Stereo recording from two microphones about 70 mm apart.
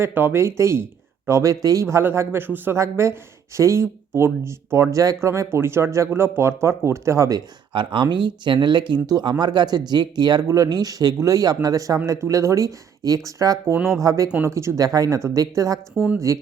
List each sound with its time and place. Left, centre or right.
0.0 s speech: right
1.3 s speech: right
2.0 s speech: right
2.7 s speech: right
8.1 s speech: right
9.0 s speech: right
9.4 s speech: right
10.5 s speech: right
12.2 s speech: right
14.4 s speech: right